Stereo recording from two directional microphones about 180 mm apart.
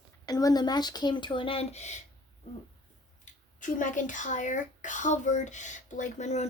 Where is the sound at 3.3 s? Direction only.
45° left (ahead or behind).